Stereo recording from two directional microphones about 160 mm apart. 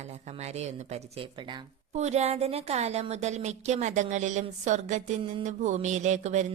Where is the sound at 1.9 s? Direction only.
45° right (ahead or behind).